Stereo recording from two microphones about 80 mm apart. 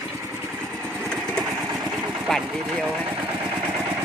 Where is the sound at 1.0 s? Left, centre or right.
Centre.